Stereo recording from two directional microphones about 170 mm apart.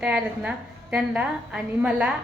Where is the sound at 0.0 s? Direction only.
5° right (ahead or behind).